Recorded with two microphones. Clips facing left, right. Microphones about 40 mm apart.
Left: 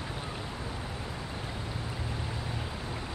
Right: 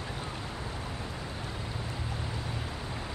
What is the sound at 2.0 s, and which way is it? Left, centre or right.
Vehicle, centre.